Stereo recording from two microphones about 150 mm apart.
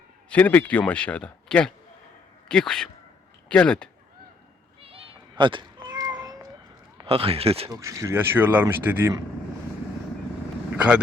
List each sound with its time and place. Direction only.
0.3 s a man's voice: 10° left (ahead or behind)
4.8 s cat: 40° right (ahead or behind)
7.0 s speech: 40° right (ahead or behind)
7.7 s speech: 20° right (ahead or behind)
10.8 s speech: 10° right (ahead or behind)